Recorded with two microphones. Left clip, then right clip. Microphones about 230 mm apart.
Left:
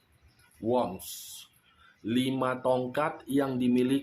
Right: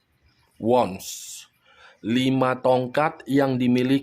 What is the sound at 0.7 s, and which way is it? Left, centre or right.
Speech, right.